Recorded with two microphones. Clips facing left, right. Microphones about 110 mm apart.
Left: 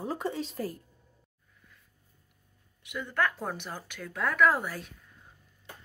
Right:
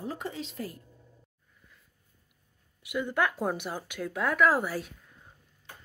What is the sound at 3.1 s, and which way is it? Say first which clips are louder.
Speech: right 1 dB; 15° right (ahead or behind).